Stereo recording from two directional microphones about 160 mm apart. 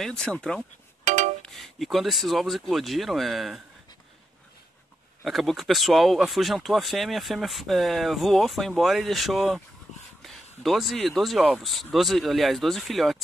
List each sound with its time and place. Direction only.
0.0 s speech: 5° left (ahead or behind)
1.0 s chink: 50° right (ahead or behind)
1.4 s speech: centre (ahead or behind)
5.2 s speech: centre (ahead or behind)